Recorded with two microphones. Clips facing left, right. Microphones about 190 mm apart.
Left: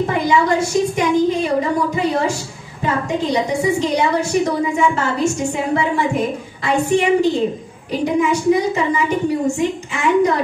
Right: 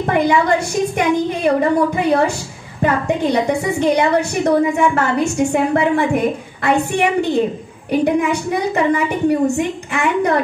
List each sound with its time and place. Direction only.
0.1 s a woman's voice: 60° right (ahead or behind)